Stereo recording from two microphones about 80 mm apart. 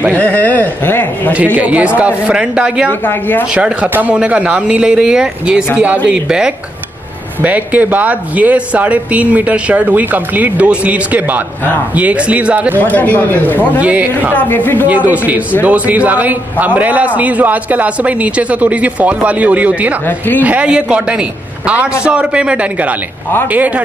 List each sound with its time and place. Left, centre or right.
0.1 s speech: left
1.3 s speech: right
2.9 s speech: left
3.5 s a man's voice: centre
12.7 s speech: left
13.7 s a man's voice: centre
14.3 s speech: left
14.9 s a man's voice: right
20.1 s speech: left
20.4 s a man's voice: centre